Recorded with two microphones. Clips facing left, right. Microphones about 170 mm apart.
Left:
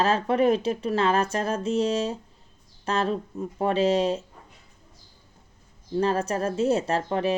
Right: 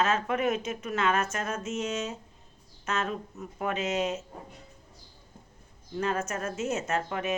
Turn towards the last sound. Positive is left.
turn(degrees=35)  # may be behind; listen again after turning